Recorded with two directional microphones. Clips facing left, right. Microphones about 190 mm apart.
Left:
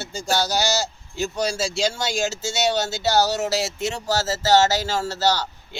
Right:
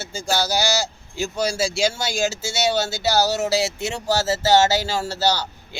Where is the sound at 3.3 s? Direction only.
10° right (ahead or behind).